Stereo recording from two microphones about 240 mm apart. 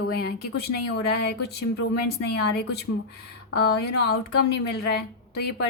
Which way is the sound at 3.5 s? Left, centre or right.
Left.